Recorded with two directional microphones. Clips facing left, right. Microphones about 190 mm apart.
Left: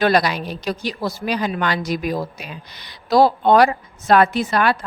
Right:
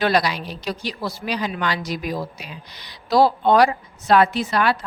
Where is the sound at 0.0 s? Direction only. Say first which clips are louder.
Left 3 dB; 50° left (ahead or behind).